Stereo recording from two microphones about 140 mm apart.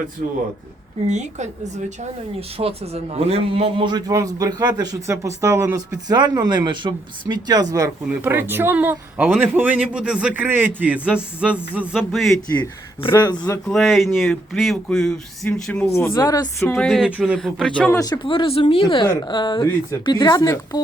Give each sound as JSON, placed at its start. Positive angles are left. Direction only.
{"t": 1.0, "sound": "a woman's voice", "side_deg": -55}
{"t": 2.6, "sound": "a man's voice", "side_deg": -45}
{"t": 8.0, "sound": "speech", "side_deg": -15}
{"t": 13.0, "sound": "speech", "side_deg": 35}
{"t": 13.7, "sound": "speech", "side_deg": 0}
{"t": 16.2, "sound": "speech", "side_deg": 20}
{"t": 16.7, "sound": "speech", "side_deg": 0}
{"t": 18.0, "sound": "speech", "side_deg": 30}
{"t": 20.4, "sound": "speech", "side_deg": 20}